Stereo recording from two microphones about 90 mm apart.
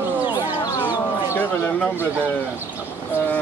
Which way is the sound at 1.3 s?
20° left (ahead or behind).